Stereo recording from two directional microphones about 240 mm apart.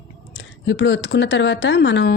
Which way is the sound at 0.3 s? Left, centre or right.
Left.